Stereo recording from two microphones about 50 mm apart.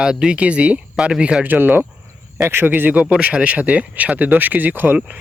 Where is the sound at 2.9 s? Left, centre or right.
Right.